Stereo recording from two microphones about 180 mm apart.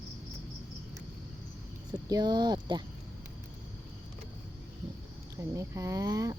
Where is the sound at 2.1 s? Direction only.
20° right (ahead or behind).